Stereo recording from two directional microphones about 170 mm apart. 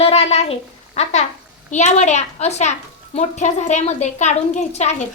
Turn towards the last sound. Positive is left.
turn(degrees=40)  # may be behind; listen again after turning